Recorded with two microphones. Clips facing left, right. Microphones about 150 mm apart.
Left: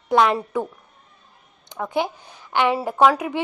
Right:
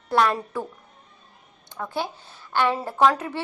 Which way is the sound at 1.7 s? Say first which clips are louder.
Left 5 dB; 20° left (ahead or behind).